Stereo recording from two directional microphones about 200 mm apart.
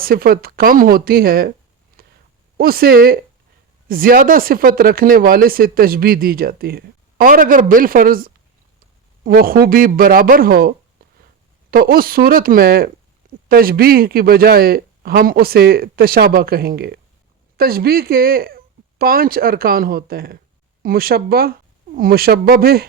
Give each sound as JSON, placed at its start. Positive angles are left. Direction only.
{"t": 0.0, "sound": "speech", "side_deg": -50}
{"t": 2.0, "sound": "a sound", "side_deg": -50}
{"t": 2.6, "sound": "speech", "side_deg": -50}